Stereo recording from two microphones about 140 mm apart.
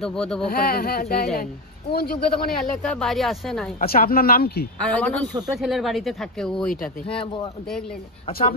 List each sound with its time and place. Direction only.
0.0 s speech: 5° left (ahead or behind)
0.5 s speech: 90° left
2.6 s speech: 5° left (ahead or behind)
3.8 s speech: 90° left
4.8 s speech: 10° left (ahead or behind)
5.6 s speech: centre (ahead or behind)
7.1 s speech: 40° left (ahead or behind)
8.3 s speech: 90° left